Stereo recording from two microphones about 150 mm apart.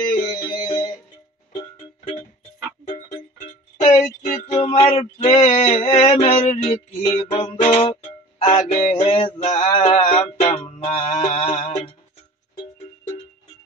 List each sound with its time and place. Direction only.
0.1 s music: 35° left (ahead or behind)
3.1 s music: 40° left (ahead or behind)
4.0 s music: 60° left (ahead or behind)
4.6 s male singing: 40° left (ahead or behind)
7.7 s music: 40° left (ahead or behind)
11.1 s mantra: 55° left (ahead or behind)